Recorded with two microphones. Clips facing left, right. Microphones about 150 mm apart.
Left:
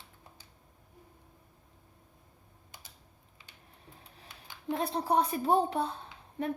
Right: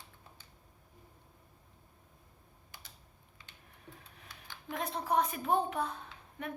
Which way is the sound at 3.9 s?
30° left (ahead or behind).